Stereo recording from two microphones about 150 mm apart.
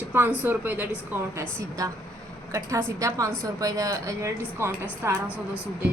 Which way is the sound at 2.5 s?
25° right (ahead or behind).